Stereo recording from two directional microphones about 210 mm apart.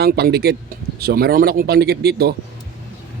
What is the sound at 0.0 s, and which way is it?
Speech, 50° right (ahead or behind).